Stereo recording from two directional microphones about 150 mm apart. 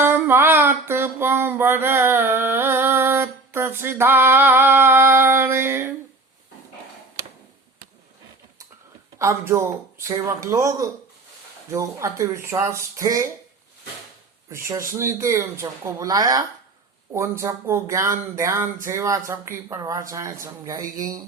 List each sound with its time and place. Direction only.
0.0 s a sound: 15° right (ahead or behind)
9.1 s speech: 20° right (ahead or behind)
14.5 s speech: 20° right (ahead or behind)